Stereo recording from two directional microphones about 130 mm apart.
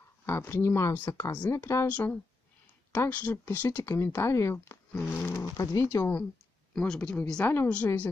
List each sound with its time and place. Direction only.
0.2 s speech: 15° left (ahead or behind)
1.9 s speech: 10° left (ahead or behind)
6.7 s speech: 5° left (ahead or behind)
7.0 s speech: 15° left (ahead or behind)